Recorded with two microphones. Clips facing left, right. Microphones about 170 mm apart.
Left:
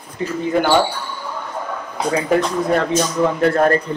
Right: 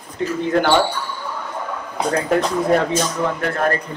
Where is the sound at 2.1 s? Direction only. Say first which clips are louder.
Left 1 dB; centre (ahead or behind).